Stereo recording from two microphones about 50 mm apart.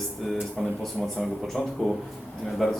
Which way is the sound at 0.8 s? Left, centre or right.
Centre.